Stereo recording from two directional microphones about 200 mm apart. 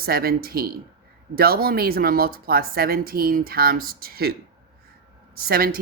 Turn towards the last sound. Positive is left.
turn(degrees=-50)  # may be behind; listen again after turning